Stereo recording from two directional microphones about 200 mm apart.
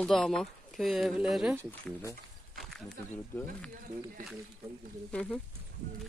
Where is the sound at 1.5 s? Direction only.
10° left (ahead or behind).